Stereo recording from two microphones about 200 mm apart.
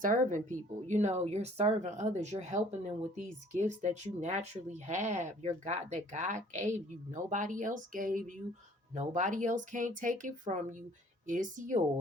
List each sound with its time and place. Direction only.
0.0 s speech: 40° right (ahead or behind)